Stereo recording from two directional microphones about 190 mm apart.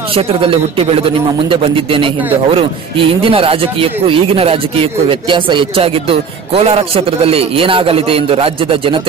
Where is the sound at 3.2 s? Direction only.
30° right (ahead or behind).